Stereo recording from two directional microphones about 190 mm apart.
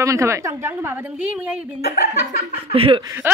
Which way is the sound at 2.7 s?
30° right (ahead or behind).